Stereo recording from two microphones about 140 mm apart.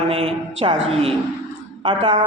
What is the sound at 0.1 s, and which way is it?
A woman's voice, 45° right (ahead or behind).